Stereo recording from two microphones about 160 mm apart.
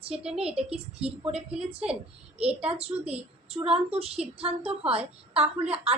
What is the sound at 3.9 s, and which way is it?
A woman's voice, 40° right (ahead or behind).